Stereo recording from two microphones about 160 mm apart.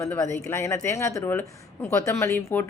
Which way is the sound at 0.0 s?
20° left (ahead or behind).